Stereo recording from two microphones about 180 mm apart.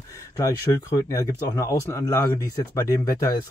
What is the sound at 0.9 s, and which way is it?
Speech, 20° left (ahead or behind).